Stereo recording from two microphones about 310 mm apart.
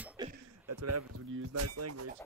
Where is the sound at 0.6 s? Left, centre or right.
Right.